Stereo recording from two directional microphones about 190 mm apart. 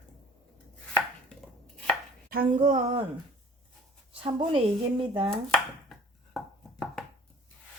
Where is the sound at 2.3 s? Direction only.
45° right (ahead or behind).